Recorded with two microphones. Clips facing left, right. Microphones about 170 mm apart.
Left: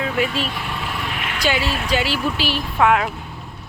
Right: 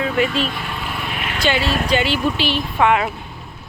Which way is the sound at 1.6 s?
45° right (ahead or behind).